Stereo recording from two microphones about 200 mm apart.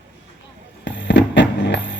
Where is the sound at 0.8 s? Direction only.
65° left (ahead or behind).